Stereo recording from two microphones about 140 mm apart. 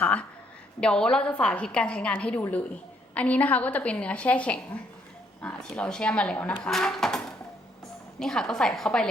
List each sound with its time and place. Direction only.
0.0 s a woman's voice: 10° left (ahead or behind)